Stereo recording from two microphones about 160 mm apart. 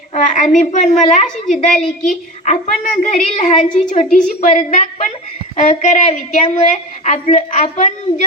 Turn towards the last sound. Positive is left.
turn(degrees=50)  # may be behind; listen again after turning